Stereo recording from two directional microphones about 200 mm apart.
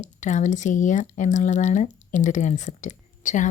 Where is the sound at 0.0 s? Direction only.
35° left (ahead or behind).